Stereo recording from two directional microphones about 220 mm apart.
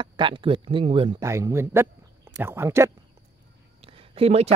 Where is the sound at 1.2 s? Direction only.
15° right (ahead or behind).